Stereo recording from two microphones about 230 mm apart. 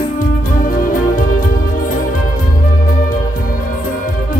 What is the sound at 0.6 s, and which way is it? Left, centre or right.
Music, left.